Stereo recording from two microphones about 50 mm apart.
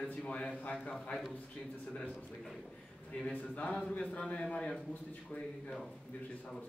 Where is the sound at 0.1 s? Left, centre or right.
Left.